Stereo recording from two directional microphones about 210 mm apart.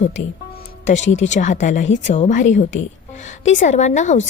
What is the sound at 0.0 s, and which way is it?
Speech, 35° left (ahead or behind).